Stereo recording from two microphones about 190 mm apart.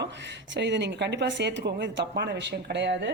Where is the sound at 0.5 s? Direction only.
65° right (ahead or behind).